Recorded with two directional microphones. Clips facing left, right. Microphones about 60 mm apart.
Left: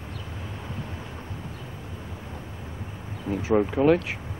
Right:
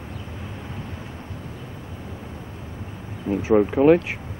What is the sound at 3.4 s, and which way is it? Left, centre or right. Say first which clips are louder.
Speech: right 5 dB; right.